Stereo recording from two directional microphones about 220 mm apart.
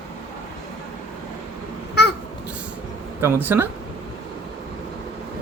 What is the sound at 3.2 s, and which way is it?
Speech, 10° right (ahead or behind).